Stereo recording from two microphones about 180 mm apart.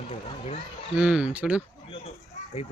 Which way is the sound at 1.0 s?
5° right (ahead or behind).